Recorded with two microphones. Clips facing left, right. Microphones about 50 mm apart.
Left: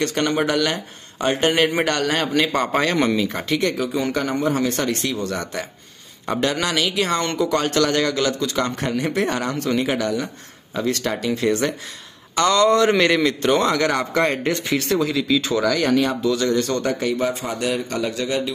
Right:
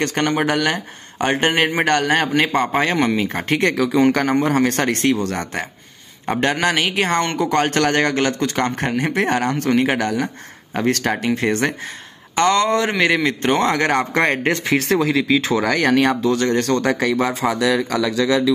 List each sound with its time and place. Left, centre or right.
0.0 s speech: right
3.3 s speech: right
3.7 s speech: right
6.2 s speech: right
12.4 s speech: right
13.2 s speech: right